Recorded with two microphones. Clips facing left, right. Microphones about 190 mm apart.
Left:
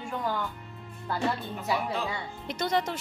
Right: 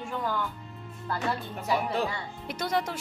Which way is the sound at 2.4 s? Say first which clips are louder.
Left 1 dB; 5° right (ahead or behind).